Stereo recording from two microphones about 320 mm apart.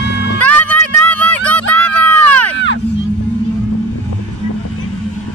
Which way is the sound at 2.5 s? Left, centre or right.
Left.